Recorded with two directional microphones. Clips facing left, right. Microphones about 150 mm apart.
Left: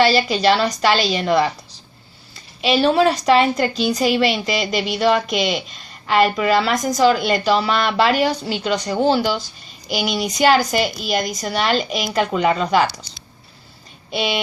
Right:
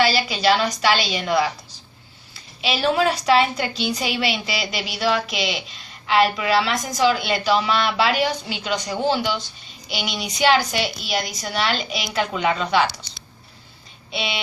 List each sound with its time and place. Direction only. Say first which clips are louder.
0.0 s a woman's voice: left 4 dB; 40° left (ahead or behind)
2.6 s a woman's voice: left 5 dB; 45° left (ahead or behind)
14.1 s a woman's voice: left 6 dB; 50° left (ahead or behind)